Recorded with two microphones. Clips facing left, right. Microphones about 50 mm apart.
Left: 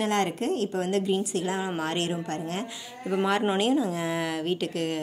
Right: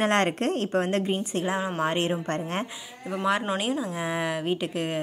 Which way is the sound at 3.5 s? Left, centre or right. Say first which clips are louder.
Left 3 dB; centre.